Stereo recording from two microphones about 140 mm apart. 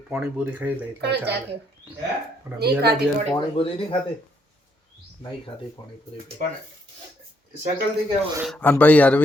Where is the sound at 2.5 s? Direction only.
20° right (ahead or behind).